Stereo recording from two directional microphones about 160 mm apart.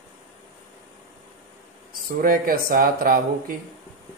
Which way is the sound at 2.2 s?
65° right (ahead or behind).